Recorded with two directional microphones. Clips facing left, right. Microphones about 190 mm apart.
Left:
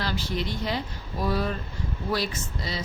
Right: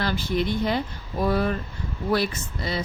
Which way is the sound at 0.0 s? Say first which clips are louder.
Right 5 dB; 55° right (ahead or behind).